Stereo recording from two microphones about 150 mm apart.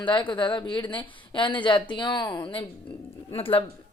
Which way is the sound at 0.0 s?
30° left (ahead or behind).